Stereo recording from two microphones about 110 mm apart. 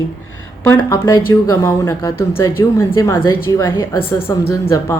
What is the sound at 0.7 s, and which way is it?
Speech, 20° left (ahead or behind).